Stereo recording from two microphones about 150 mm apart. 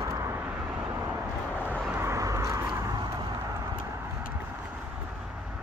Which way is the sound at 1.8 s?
15° right (ahead or behind).